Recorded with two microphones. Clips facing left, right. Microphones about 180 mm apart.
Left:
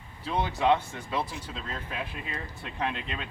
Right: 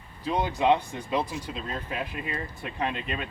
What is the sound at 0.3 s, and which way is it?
Speech, 15° right (ahead or behind).